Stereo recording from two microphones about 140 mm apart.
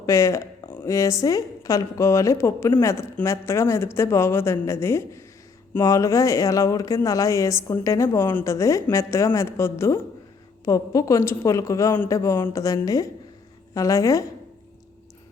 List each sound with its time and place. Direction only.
0.0 s a woman's voice: 20° left (ahead or behind)